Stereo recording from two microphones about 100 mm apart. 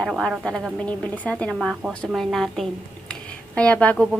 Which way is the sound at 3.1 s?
10° left (ahead or behind).